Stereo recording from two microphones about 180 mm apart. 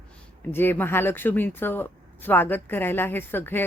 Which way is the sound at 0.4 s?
10° left (ahead or behind).